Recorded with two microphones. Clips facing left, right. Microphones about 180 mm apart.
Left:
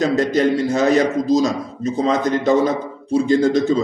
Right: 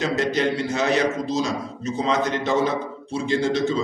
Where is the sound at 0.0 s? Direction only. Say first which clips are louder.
Left 6 dB; 45° left (ahead or behind).